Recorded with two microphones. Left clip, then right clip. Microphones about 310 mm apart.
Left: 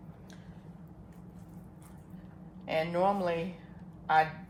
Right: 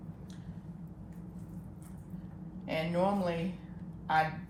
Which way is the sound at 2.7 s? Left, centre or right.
Left.